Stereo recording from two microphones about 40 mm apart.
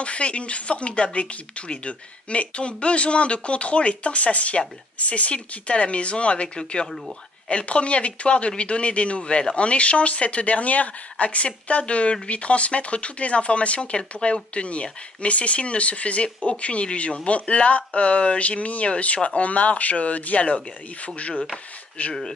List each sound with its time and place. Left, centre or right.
0.0 s speech: left